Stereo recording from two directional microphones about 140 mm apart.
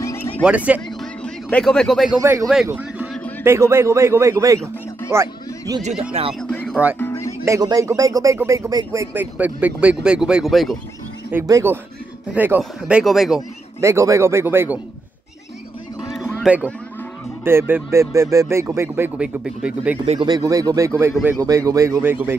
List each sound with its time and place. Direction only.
0.4 s speech: 10° right (ahead or behind)
1.2 s speech: 5° left (ahead or behind)
2.1 s a man's voice: 25° right (ahead or behind)
2.4 s speech: 5° right (ahead or behind)
2.7 s music: 10° right (ahead or behind)
3.4 s a man's voice: 20° right (ahead or behind)
5.8 s speech: 55° right (ahead or behind)
6.5 s music: 10° left (ahead or behind)
7.0 s music: 20° left (ahead or behind)
7.4 s speech: 25° right (ahead or behind); by 10.8 s centre (ahead or behind)
11.3 s speech: 20° right (ahead or behind); by 13.4 s centre (ahead or behind)
13.7 s a man's voice: 20° right (ahead or behind)
16.4 s speech: 10° right (ahead or behind)
20.2 s a man's voice: 30° right (ahead or behind)